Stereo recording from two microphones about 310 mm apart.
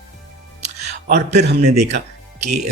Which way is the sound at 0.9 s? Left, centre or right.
Right.